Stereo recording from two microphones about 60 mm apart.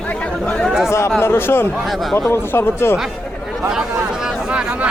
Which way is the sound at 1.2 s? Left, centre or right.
Left.